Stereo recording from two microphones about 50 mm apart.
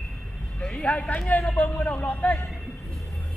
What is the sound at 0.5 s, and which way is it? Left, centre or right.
Speech, left.